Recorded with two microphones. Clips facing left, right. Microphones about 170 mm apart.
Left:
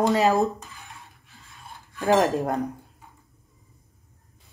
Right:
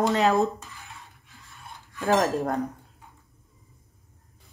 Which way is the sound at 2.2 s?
Centre (ahead or behind).